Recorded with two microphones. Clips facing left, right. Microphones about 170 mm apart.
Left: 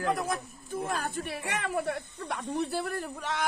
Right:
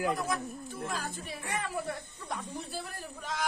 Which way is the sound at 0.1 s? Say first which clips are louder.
Left 2 dB; 55° left (ahead or behind).